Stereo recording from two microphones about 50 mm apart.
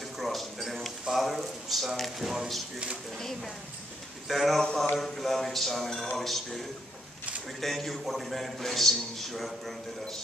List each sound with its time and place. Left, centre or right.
0.2 s a sound: centre
4.3 s a man's voice: centre
7.6 s a man's voice: centre